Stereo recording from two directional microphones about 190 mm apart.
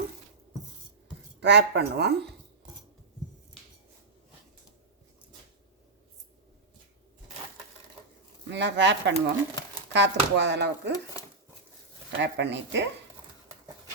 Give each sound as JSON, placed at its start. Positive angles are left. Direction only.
{"t": 1.4, "sound": "speech", "side_deg": -65}
{"t": 8.4, "sound": "speech", "side_deg": -65}
{"t": 12.2, "sound": "speech", "side_deg": -65}